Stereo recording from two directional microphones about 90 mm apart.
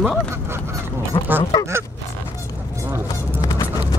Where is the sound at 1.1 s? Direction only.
60° left (ahead or behind).